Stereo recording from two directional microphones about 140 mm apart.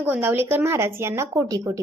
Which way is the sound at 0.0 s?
15° right (ahead or behind).